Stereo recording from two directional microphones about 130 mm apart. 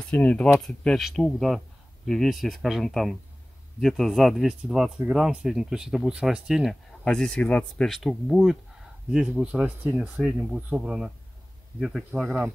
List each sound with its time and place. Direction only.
0.1 s speech: 10° left (ahead or behind)